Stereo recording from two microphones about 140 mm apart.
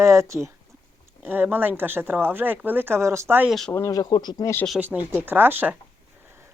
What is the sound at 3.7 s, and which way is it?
Speech, 25° left (ahead or behind).